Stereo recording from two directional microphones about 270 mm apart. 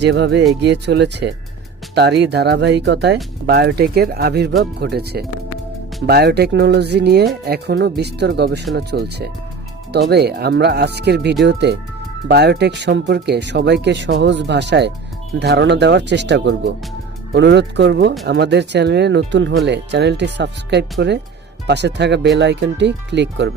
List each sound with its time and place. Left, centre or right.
0.0 s speech: right